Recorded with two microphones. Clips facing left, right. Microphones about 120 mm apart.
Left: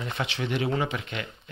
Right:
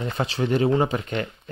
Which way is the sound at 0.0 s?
40° right (ahead or behind).